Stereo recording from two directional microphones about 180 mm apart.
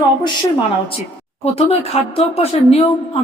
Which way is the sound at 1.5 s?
35° left (ahead or behind).